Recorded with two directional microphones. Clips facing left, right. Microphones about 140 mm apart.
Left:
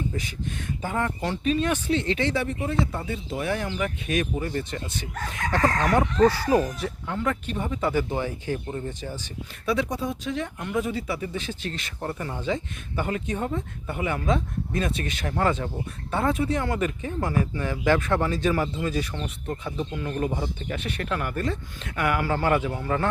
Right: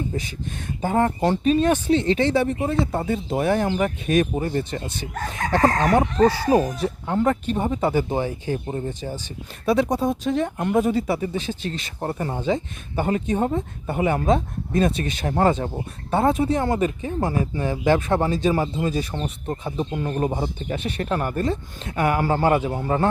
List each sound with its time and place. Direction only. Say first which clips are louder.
0.1 s speech: right 2 dB; 30° right (ahead or behind)